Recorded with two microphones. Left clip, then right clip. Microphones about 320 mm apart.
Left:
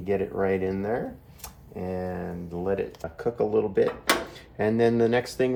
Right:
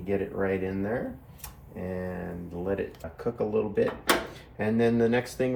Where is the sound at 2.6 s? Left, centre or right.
Left.